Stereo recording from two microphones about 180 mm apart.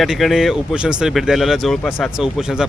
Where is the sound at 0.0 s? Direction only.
Centre (ahead or behind).